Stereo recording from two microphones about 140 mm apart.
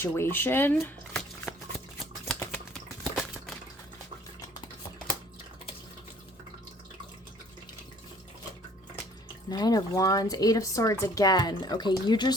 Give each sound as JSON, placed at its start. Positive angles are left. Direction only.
{"t": 0.0, "sound": "speech", "side_deg": 15}
{"t": 2.3, "sound": "typing", "side_deg": 15}
{"t": 3.0, "sound": "a sound", "side_deg": 0}
{"t": 9.5, "sound": "speech", "side_deg": 30}